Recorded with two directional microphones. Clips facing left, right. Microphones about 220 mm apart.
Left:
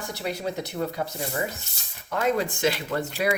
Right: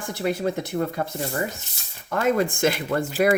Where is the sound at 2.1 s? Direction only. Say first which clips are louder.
Right 3 dB; 50° right (ahead or behind).